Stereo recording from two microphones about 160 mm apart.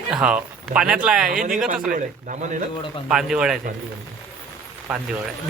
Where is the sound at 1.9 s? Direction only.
50° right (ahead or behind).